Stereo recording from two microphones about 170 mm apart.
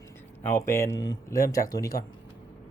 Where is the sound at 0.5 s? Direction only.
15° left (ahead or behind).